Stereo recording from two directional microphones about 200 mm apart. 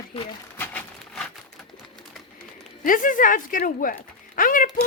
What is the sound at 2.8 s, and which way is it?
Speech, 40° left (ahead or behind).